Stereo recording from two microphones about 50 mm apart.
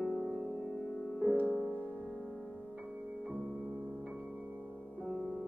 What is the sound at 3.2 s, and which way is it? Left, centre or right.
Music, right.